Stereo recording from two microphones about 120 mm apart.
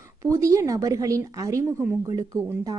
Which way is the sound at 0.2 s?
25° right (ahead or behind).